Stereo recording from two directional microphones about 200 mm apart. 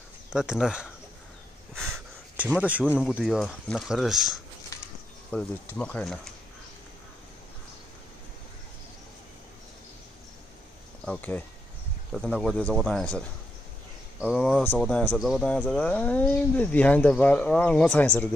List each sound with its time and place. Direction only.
0.3 s speech: 5° right (ahead or behind)
1.8 s a sound: 5° right (ahead or behind)
2.8 s speech: centre (ahead or behind)
4.7 s a sound: 15° left (ahead or behind)
5.3 s speech: 5° left (ahead or behind)
11.1 s speech: 10° left (ahead or behind)
14.2 s speech: 5° left (ahead or behind)